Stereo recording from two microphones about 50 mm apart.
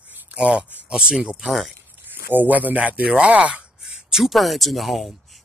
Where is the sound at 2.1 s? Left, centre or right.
Right; by 4.3 s centre.